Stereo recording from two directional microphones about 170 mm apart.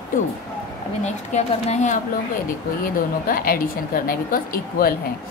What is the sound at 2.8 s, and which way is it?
A woman's voice, 55° left (ahead or behind).